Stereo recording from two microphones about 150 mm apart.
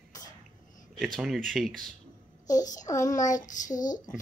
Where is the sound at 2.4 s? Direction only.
25° left (ahead or behind).